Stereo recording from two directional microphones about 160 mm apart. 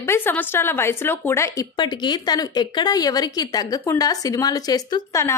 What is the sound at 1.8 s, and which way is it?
Speech, 30° left (ahead or behind).